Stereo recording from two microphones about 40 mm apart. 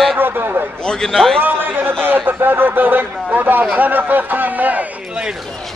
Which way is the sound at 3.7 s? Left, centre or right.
Right.